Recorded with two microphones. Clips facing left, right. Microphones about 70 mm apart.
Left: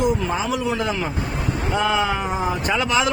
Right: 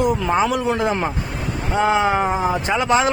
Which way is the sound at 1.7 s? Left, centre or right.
Right.